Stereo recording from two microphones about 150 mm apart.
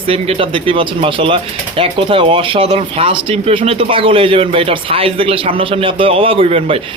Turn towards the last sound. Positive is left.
turn(degrees=-40)  # may be behind; listen again after turning